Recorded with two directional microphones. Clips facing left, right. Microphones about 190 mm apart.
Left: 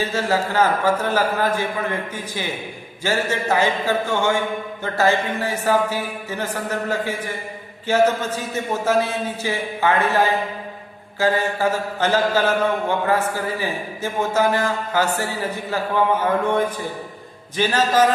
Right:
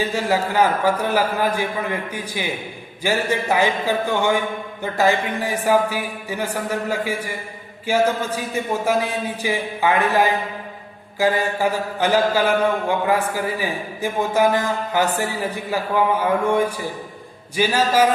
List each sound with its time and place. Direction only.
0.0 s a man's voice: 15° right (ahead or behind)